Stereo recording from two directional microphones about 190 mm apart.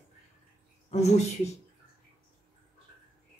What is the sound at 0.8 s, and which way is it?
Speech, 35° left (ahead or behind).